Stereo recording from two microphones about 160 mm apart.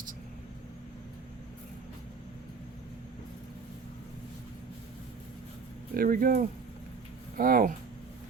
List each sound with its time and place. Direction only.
5.9 s speech: 60° right (ahead or behind)